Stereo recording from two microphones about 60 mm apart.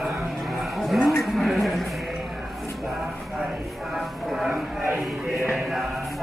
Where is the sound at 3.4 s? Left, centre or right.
Centre.